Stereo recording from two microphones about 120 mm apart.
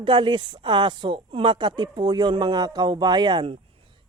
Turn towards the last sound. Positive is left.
turn(degrees=-40)  # may be behind; listen again after turning